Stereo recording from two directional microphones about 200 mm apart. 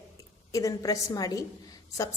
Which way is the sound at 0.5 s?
15° left (ahead or behind).